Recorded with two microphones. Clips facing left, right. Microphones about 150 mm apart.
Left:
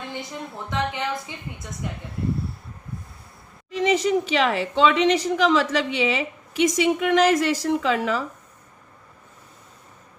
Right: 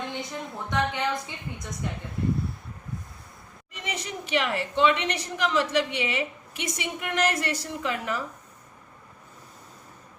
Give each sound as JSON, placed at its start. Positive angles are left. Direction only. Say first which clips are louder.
{"t": 0.1, "sound": "a sound", "louder": "left 1 dB", "side_deg": 0}
{"t": 0.7, "sound": "a woman's voice", "louder": "even", "side_deg": 0}
{"t": 3.7, "sound": "a woman's voice", "louder": "left 15 dB", "side_deg": 90}